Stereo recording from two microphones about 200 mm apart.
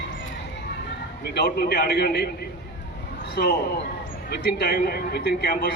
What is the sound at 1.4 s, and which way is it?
Speech, 55° left (ahead or behind).